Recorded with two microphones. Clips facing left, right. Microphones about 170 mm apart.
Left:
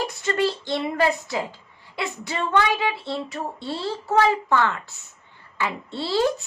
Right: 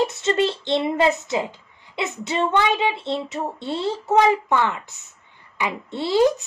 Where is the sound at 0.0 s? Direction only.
25° right (ahead or behind).